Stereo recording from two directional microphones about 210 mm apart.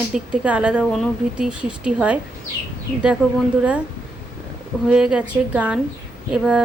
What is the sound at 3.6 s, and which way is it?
Speech, 5° right (ahead or behind).